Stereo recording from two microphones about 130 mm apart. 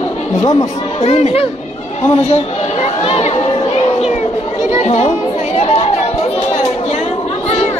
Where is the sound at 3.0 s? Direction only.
50° left (ahead or behind).